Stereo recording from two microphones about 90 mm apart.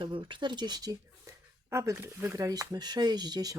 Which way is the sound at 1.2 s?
35° right (ahead or behind).